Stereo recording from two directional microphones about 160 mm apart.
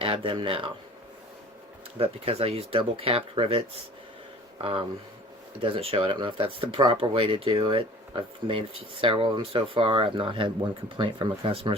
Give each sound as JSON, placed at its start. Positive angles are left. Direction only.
{"t": 0.0, "sound": "speech", "side_deg": -35}
{"t": 2.0, "sound": "speech", "side_deg": -40}